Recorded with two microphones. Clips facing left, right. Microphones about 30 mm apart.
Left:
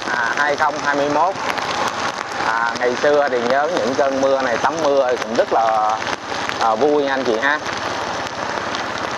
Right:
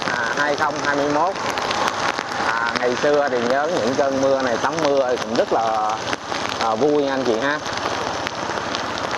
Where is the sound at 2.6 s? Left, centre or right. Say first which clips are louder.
Left 3 dB; centre.